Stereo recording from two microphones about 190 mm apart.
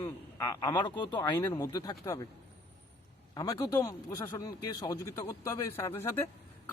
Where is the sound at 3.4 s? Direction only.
20° left (ahead or behind).